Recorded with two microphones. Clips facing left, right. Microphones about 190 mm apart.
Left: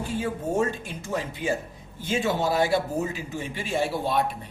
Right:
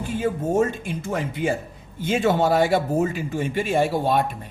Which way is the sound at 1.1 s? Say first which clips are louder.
Right 3 dB; 55° right (ahead or behind).